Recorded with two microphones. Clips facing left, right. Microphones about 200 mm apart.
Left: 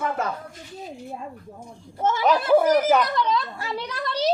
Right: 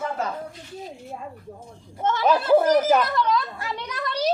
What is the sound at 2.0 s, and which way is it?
A child's voice, 10° left (ahead or behind).